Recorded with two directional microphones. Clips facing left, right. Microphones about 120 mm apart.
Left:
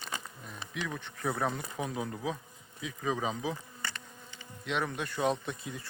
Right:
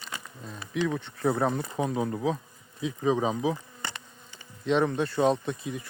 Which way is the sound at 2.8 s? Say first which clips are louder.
Right 7 dB; 20° right (ahead or behind).